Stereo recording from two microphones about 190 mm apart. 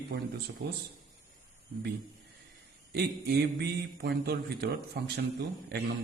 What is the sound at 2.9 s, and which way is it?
A man's voice, 55° right (ahead or behind).